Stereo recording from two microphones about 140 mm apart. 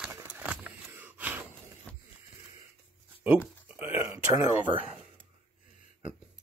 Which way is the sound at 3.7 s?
15° right (ahead or behind).